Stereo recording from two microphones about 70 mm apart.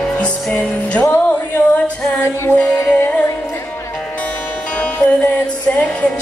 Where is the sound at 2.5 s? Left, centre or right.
Centre.